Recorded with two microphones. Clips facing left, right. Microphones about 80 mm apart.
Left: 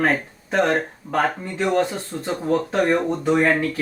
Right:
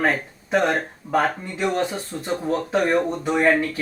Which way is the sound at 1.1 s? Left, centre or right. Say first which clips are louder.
Right 1 dB; centre.